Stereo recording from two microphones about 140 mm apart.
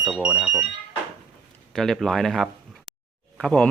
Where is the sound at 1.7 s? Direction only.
5° left (ahead or behind).